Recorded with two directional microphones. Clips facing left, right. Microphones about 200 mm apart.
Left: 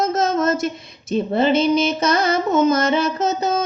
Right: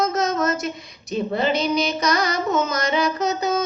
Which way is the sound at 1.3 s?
25° left (ahead or behind).